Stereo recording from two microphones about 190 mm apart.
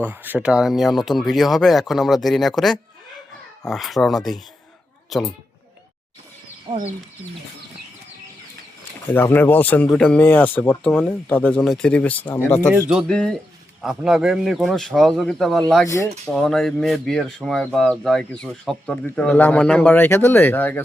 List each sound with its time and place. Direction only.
0.0 s speech: 10° right (ahead or behind)
6.7 s speech: 30° right (ahead or behind)
9.1 s speech: 10° left (ahead or behind)
12.9 s speech: 5° right (ahead or behind)
15.9 s speech: 15° left (ahead or behind)
16.3 s speech: centre (ahead or behind)